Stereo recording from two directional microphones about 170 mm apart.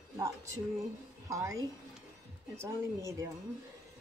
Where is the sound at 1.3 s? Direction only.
20° right (ahead or behind).